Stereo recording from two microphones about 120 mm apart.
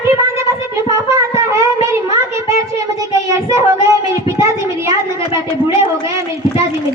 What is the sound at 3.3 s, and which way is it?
Child singing, 25° right (ahead or behind).